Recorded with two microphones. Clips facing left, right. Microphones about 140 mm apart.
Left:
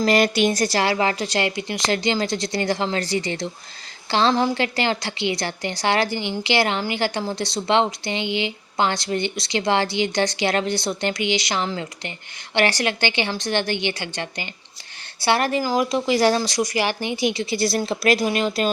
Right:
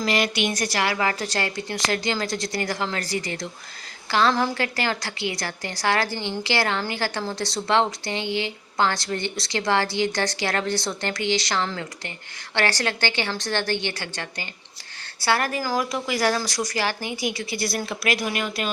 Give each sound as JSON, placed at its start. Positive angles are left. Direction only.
{"t": 0.0, "sound": "a woman's voice", "side_deg": 40}
{"t": 0.4, "sound": "a woman's voice", "side_deg": 30}